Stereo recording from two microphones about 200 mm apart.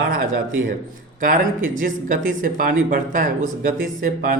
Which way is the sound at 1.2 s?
40° right (ahead or behind).